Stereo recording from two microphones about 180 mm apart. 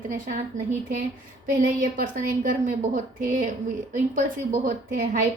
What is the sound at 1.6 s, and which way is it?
A woman's voice, 50° right (ahead or behind).